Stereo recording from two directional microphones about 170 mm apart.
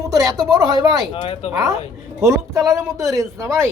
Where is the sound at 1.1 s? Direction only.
35° left (ahead or behind).